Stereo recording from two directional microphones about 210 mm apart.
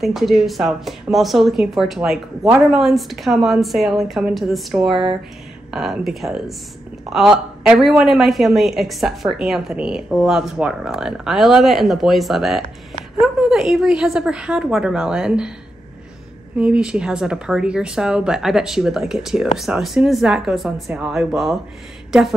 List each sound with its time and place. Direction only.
0.0 s speech: centre (ahead or behind)
16.5 s speech: 5° right (ahead or behind)